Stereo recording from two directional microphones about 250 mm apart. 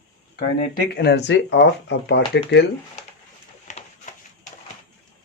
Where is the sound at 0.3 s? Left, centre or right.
Left.